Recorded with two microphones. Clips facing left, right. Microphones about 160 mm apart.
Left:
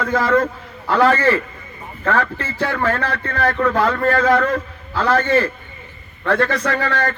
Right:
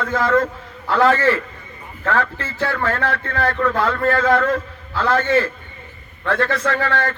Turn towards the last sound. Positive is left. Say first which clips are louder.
# even
turn(degrees=15)  # may be behind; listen again after turning